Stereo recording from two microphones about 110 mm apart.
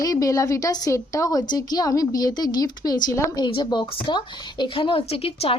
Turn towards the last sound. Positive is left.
turn(degrees=60)  # may be behind; listen again after turning